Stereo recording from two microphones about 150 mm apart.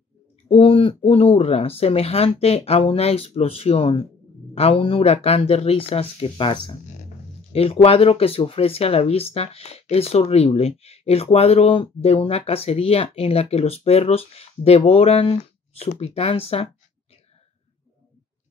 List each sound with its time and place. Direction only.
0.5 s speech: 40° left (ahead or behind)